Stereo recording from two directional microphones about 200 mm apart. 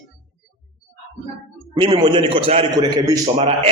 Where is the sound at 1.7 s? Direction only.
20° right (ahead or behind).